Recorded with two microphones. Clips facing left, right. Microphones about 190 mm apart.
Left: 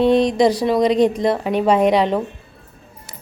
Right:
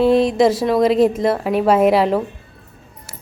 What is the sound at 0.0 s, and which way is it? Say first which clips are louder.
A woman's voice: right 1 dB; 5° right (ahead or behind).